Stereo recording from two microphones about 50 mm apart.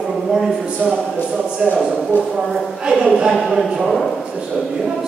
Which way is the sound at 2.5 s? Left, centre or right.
Centre.